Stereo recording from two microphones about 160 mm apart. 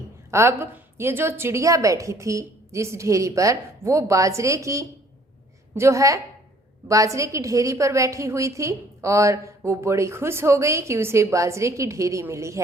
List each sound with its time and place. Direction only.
0.3 s a woman's voice: 15° right (ahead or behind)